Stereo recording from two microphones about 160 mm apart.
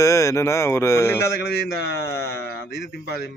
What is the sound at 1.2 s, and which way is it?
A man's voice, 90° left.